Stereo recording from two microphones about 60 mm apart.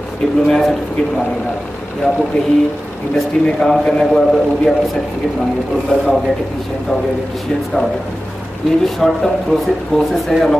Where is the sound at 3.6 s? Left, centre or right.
Centre.